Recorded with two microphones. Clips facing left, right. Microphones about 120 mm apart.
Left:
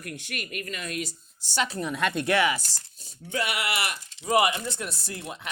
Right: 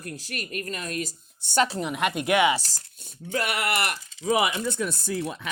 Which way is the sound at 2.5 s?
40° right (ahead or behind).